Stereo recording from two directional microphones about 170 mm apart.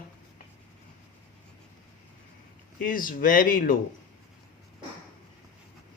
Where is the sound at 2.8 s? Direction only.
55° left (ahead or behind).